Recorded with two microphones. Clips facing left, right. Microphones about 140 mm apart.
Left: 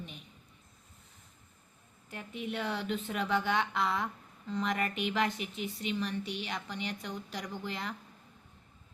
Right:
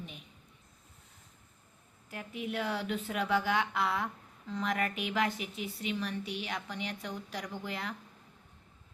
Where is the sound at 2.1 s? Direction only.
5° right (ahead or behind).